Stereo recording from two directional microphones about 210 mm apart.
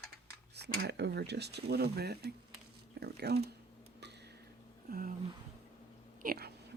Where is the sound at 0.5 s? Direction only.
50° right (ahead or behind).